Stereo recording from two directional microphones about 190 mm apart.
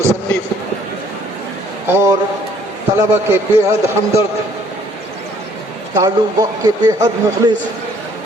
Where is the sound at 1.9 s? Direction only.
15° right (ahead or behind).